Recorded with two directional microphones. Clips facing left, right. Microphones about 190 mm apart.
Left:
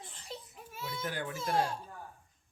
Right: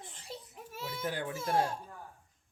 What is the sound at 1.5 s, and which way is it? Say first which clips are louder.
Speech: right 1 dB; 25° right (ahead or behind).